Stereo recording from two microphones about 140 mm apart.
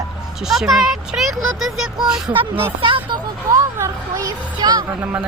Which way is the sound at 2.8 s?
35° right (ahead or behind).